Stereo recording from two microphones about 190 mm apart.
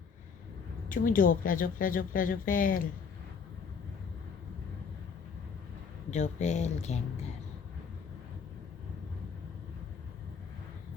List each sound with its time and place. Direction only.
0.9 s a woman's voice: 45° left (ahead or behind)
6.1 s speech: 40° left (ahead or behind)